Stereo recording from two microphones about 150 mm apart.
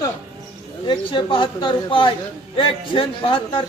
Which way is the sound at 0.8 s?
30° left (ahead or behind).